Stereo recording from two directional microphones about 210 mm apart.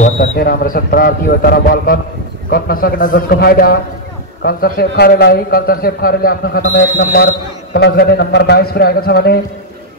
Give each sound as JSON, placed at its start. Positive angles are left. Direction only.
{"t": 0.2, "sound": "a man's voice", "side_deg": 45}